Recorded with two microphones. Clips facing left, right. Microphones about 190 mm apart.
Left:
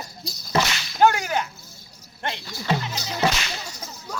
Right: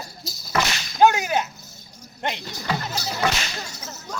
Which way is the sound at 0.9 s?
15° right (ahead or behind).